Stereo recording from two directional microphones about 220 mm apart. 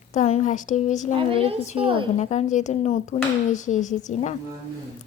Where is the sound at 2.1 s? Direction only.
30° left (ahead or behind).